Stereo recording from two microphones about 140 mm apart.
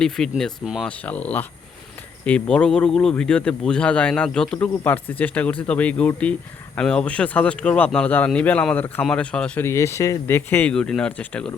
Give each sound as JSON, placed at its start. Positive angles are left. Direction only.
{"t": 0.0, "sound": "speech", "side_deg": 5}
{"t": 0.9, "sound": "speech", "side_deg": 10}
{"t": 9.6, "sound": "speech", "side_deg": 20}